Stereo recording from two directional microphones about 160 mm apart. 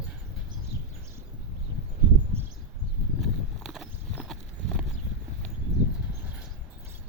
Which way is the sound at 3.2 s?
Centre (ahead or behind).